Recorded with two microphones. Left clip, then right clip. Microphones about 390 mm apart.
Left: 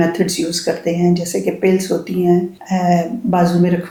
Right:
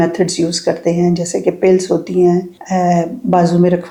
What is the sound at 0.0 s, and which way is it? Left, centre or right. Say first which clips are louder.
Speech: right 2 dB; right.